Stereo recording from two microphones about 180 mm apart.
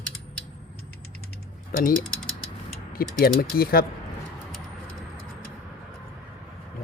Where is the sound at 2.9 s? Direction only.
55° left (ahead or behind).